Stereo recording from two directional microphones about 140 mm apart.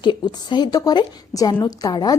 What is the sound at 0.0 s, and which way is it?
A woman's voice, 30° left (ahead or behind).